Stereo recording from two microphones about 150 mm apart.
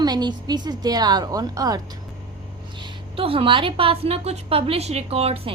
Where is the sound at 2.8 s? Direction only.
40° right (ahead or behind).